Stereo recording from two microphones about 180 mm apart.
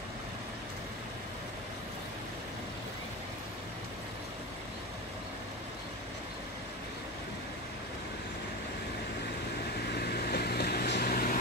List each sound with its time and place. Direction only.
9.9 s vehicle: 60° left (ahead or behind)